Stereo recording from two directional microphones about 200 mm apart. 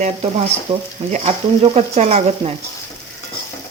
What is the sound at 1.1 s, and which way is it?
Speech, 30° right (ahead or behind).